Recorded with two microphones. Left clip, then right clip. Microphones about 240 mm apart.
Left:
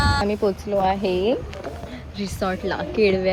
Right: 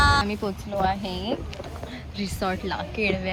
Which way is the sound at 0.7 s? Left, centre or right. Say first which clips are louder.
Left 3 dB; right.